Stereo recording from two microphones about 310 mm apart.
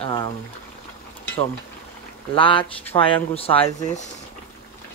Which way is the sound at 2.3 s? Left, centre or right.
Centre.